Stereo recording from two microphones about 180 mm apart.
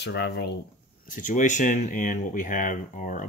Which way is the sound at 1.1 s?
45° left (ahead or behind).